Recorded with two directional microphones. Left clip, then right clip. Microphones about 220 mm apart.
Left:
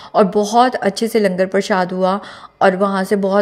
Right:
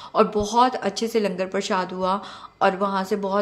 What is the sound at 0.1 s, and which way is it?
A woman's voice, 25° left (ahead or behind).